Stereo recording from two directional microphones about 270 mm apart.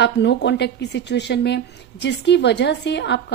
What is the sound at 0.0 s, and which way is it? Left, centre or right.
A woman's voice, left.